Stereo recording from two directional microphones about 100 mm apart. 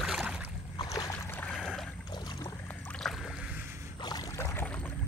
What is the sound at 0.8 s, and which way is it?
Boat, 35° left (ahead or behind).